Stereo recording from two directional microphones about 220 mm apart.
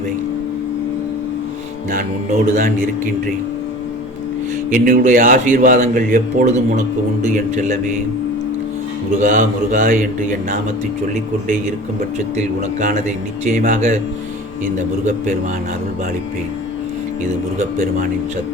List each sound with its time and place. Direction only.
1.9 s speech: 35° right (ahead or behind)
4.7 s speech: 35° right (ahead or behind)
9.1 s speech: 35° right (ahead or behind)
12.4 s speech: 35° right (ahead or behind)
17.2 s speech: 30° right (ahead or behind)